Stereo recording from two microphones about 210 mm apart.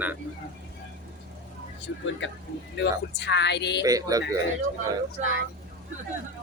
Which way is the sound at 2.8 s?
55° left (ahead or behind).